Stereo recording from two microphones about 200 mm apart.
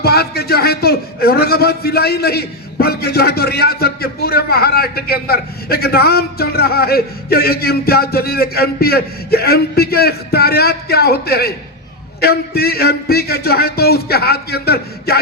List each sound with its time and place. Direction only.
0.0 s a man's voice: 50° left (ahead or behind)